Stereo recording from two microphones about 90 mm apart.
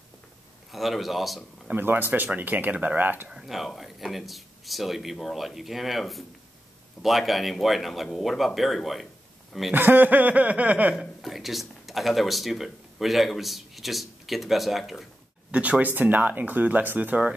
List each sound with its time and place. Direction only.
0.7 s speech: centre (ahead or behind)
1.7 s speech: 20° right (ahead or behind)
3.3 s speech: 5° right (ahead or behind)
9.8 s a sound: 20° right (ahead or behind)
11.0 s speech: centre (ahead or behind)
15.5 s speech: 15° right (ahead or behind)